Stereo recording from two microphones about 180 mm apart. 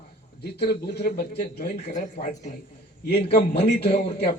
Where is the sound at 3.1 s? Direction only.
65° left (ahead or behind).